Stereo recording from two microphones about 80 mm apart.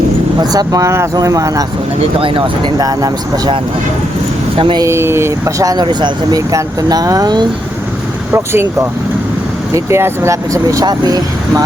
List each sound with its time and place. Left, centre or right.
0.3 s speech: right
2.7 s speech: right
4.9 s speech: right
5.7 s speech: right
6.5 s speech: right
8.3 s speech: right
10.8 s speech: right